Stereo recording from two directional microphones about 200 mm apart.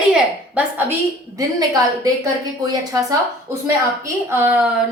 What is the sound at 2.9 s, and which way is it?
A woman's voice, 15° right (ahead or behind).